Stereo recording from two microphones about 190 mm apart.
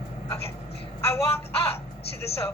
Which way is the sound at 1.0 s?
10° left (ahead or behind).